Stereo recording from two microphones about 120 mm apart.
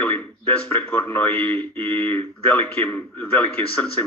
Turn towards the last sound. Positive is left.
turn(degrees=10)  # may be behind; listen again after turning